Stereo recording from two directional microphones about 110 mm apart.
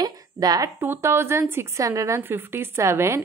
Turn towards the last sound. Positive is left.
turn(degrees=-25)  # may be behind; listen again after turning